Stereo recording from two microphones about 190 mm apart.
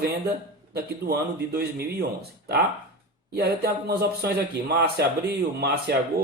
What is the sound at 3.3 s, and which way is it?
Speech, 55° right (ahead or behind).